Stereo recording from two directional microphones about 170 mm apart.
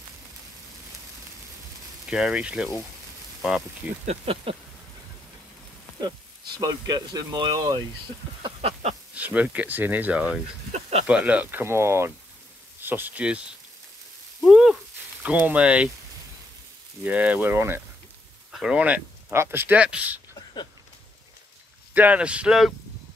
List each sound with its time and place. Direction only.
2.0 s speech: 5° right (ahead or behind)
4.0 s speech: 35° right (ahead or behind)
6.5 s speech: 25° right (ahead or behind)
8.4 s a sound: 35° right (ahead or behind)
9.1 s speech: 10° right (ahead or behind)
10.7 s a sound: 40° right (ahead or behind)
11.1 s speech: 5° right (ahead or behind)
14.4 s a sound: 5° right (ahead or behind)
15.2 s speech: 10° right (ahead or behind)
17.0 s speech: 10° right (ahead or behind)
21.9 s speech: 10° right (ahead or behind)